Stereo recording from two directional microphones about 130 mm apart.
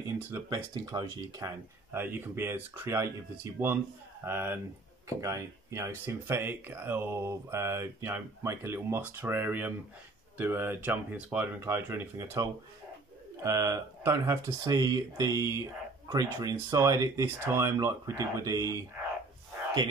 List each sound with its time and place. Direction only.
0.5 s speech: 30° right (ahead or behind)
1.9 s speech: 15° right (ahead or behind)